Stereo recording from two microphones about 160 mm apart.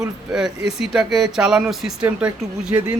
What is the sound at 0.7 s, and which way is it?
Speech, 5° right (ahead or behind).